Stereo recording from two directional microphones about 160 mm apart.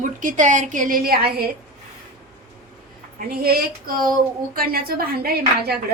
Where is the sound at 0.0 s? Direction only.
55° right (ahead or behind); by 1.5 s 70° right (ahead or behind).